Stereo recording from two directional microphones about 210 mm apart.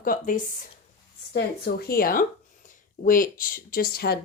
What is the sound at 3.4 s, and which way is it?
Speech, 45° left (ahead or behind).